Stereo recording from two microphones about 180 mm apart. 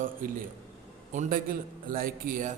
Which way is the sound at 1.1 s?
45° right (ahead or behind).